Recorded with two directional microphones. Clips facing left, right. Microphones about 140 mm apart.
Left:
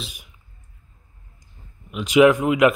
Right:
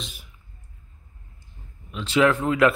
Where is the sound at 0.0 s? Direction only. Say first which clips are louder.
Left 2 dB; 15° left (ahead or behind).